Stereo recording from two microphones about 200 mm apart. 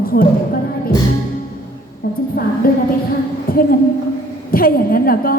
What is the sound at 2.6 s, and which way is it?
Speech, 45° left (ahead or behind).